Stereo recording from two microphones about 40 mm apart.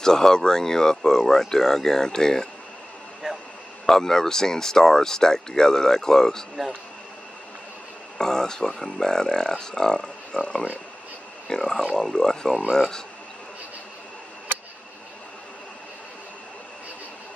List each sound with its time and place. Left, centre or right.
0.0 s speech: centre
3.2 s a sound: centre
3.8 s speech: centre
8.2 s speech: centre